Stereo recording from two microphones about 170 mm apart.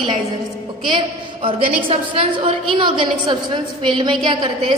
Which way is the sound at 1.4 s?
30° right (ahead or behind).